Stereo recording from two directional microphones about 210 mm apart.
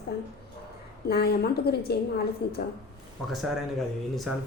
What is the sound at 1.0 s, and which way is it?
A woman's voice, 50° left (ahead or behind).